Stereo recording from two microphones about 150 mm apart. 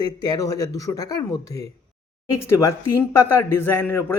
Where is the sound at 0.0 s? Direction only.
25° left (ahead or behind).